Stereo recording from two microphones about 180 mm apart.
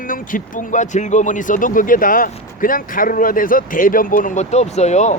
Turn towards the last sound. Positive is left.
turn(degrees=40)  # may be behind; listen again after turning